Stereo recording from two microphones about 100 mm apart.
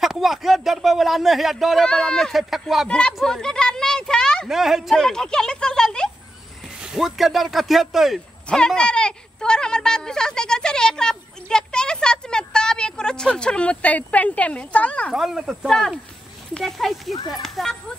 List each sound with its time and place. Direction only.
0.0 s speech: 5° right (ahead or behind)
2.9 s speech: 10° left (ahead or behind)
3.2 s a sound: 5° left (ahead or behind)
4.5 s speech: 5° right (ahead or behind)
6.8 s speech: 5° right (ahead or behind)
8.5 s speech: 10° left (ahead or behind)
15.1 s speech: 5° right (ahead or behind)